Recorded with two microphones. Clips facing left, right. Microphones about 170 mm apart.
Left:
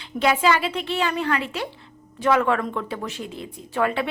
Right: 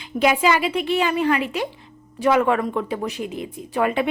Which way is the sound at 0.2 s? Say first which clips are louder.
Right 2 dB; 15° right (ahead or behind).